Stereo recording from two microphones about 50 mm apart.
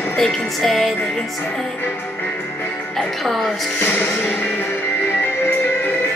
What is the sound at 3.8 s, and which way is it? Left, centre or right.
Music, left.